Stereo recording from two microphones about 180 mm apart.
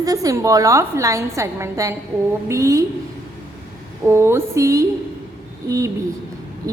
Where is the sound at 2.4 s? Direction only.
15° right (ahead or behind).